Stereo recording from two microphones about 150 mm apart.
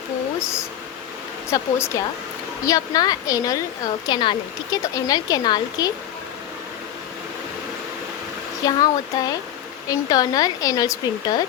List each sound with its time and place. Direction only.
1.5 s speech: 20° left (ahead or behind)
8.6 s speech: 25° left (ahead or behind)